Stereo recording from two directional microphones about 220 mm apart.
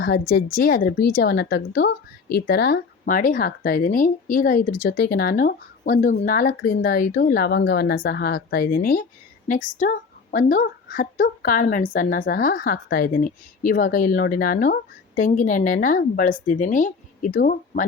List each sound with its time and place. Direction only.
0.0 s a woman's voice: 45° left (ahead or behind)